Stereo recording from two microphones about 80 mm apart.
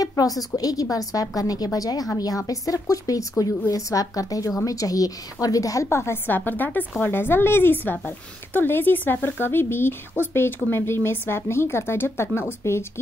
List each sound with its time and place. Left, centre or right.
0.0 s a woman's voice: left